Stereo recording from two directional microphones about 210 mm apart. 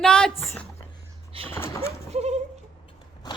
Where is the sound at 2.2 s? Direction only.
30° right (ahead or behind).